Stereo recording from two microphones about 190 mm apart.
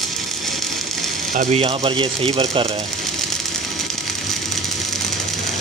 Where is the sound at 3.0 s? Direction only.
Centre (ahead or behind).